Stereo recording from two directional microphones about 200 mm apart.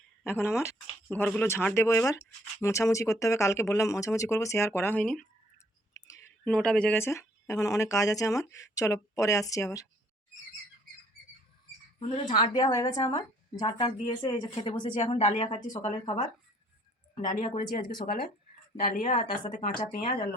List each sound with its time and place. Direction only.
0.3 s speech: 10° left (ahead or behind)
5.9 s speech: 15° left (ahead or behind)
11.9 s speech: 30° left (ahead or behind)
12.7 s a woman's voice: 15° left (ahead or behind)
17.4 s speech: 40° left (ahead or behind)